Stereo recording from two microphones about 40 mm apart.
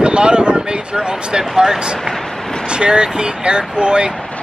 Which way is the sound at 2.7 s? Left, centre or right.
Right.